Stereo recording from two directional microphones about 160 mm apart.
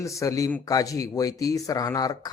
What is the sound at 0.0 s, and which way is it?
Speech, 20° left (ahead or behind).